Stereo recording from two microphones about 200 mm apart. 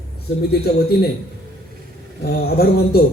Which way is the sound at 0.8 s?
50° left (ahead or behind).